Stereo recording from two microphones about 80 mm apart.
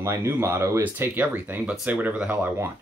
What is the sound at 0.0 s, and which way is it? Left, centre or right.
Speech, right.